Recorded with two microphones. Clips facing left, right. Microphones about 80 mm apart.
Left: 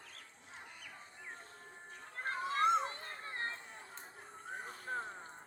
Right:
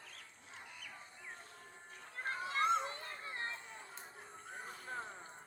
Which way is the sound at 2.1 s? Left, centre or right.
Left.